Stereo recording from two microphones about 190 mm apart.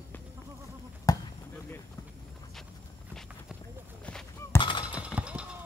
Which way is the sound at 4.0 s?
5° left (ahead or behind).